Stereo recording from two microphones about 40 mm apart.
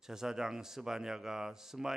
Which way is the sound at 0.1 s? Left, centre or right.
Centre.